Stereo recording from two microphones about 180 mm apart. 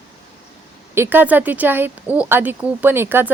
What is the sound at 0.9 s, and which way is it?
Speech, 10° right (ahead or behind).